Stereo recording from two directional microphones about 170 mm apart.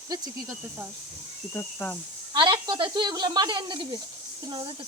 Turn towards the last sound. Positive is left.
turn(degrees=-30)  # may be behind; listen again after turning